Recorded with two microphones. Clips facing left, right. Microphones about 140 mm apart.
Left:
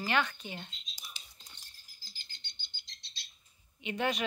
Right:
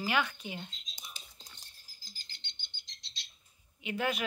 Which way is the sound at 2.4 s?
25° right (ahead or behind).